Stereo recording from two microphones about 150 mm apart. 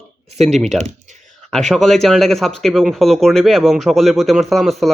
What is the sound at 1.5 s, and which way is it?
Speech, 5° left (ahead or behind).